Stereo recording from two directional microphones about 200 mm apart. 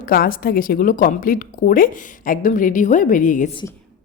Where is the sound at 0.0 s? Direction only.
45° left (ahead or behind).